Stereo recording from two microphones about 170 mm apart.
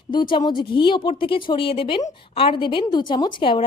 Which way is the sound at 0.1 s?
25° left (ahead or behind).